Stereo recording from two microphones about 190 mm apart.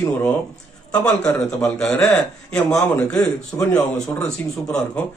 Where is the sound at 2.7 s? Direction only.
15° left (ahead or behind).